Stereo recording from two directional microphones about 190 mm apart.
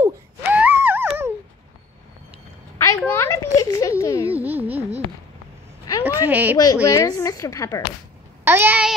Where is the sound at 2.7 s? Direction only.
15° left (ahead or behind).